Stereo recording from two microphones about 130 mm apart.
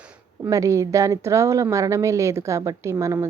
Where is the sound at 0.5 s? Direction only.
25° right (ahead or behind).